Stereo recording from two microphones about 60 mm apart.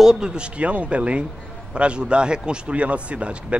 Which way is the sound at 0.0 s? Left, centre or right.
Centre.